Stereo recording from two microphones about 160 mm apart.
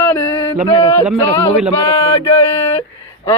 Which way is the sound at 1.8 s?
35° left (ahead or behind).